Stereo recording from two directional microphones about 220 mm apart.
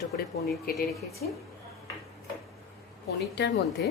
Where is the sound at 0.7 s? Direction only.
45° left (ahead or behind).